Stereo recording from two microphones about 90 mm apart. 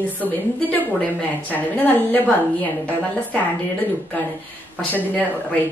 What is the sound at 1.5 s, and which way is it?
A woman's voice, 20° left (ahead or behind).